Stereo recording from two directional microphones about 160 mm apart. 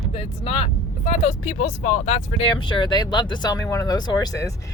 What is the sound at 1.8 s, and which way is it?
Speech, 45° left (ahead or behind).